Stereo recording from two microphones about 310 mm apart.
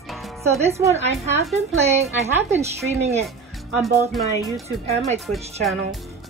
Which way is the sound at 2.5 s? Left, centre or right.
Right.